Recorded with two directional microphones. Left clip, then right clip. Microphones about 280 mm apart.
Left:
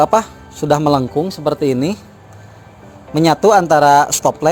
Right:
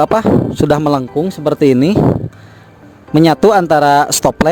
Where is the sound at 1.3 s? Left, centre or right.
Right.